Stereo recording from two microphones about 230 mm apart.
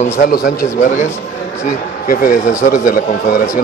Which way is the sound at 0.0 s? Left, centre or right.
Left.